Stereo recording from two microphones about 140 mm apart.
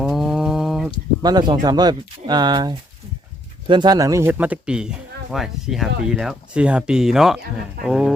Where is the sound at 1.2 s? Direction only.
30° right (ahead or behind).